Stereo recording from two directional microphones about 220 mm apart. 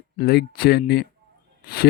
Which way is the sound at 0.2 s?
45° left (ahead or behind).